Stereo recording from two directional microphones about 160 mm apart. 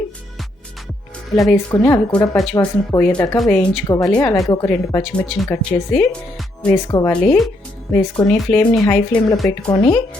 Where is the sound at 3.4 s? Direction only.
5° left (ahead or behind).